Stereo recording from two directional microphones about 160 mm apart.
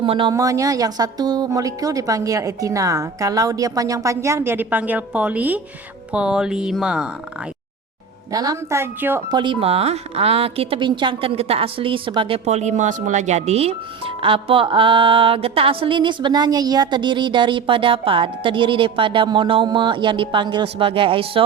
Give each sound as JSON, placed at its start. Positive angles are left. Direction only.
{"t": 0.0, "sound": "speech", "side_deg": -30}
{"t": 0.3, "sound": "a woman's voice", "side_deg": -20}
{"t": 8.3, "sound": "a woman's voice", "side_deg": -20}
{"t": 9.3, "sound": "speech", "side_deg": -30}
{"t": 12.5, "sound": "speech", "side_deg": -45}